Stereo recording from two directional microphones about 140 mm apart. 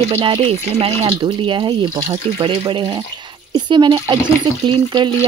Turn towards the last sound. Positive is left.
turn(degrees=-35)  # may be behind; listen again after turning